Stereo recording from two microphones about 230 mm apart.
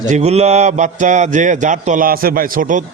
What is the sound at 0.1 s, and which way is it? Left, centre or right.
Speech, right.